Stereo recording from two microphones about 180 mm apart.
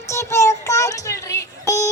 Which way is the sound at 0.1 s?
15° left (ahead or behind).